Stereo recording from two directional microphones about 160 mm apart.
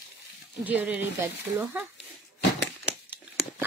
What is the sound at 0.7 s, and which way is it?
Speech, 10° right (ahead or behind).